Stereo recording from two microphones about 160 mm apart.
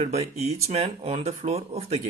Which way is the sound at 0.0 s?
40° right (ahead or behind).